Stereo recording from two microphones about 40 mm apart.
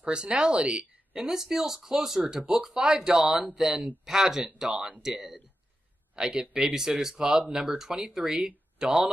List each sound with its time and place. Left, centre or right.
0.0 s speech: right
1.1 s speech: centre